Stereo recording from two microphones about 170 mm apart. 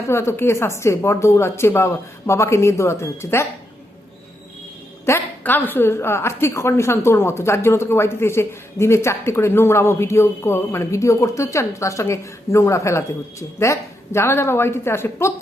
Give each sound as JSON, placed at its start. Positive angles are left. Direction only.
{"t": 0.1, "sound": "a woman's voice", "side_deg": 15}
{"t": 5.0, "sound": "a woman's voice", "side_deg": 15}